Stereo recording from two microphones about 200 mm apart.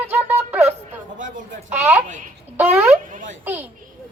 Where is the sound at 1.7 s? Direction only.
10° right (ahead or behind).